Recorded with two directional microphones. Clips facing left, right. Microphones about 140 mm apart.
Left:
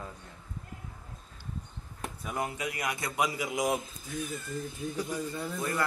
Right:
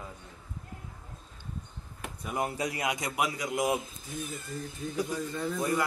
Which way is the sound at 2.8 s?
20° right (ahead or behind).